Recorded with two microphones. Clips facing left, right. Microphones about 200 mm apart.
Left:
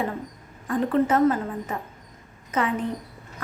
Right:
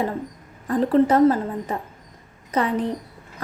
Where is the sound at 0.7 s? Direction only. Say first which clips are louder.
Right 4 dB; 35° right (ahead or behind).